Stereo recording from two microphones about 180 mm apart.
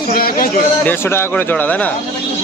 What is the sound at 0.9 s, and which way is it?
Speech, 10° left (ahead or behind).